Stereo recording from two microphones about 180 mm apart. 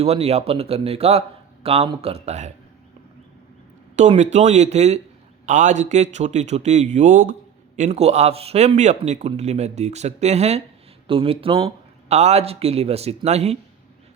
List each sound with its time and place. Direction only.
0.0 s speech: 35° right (ahead or behind)
3.9 s speech: 40° right (ahead or behind)